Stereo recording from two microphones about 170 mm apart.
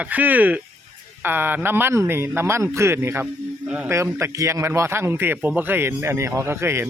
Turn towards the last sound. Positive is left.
turn(degrees=-15)  # may be behind; listen again after turning